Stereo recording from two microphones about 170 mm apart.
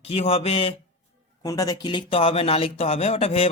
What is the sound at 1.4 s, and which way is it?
Speech, 20° left (ahead or behind).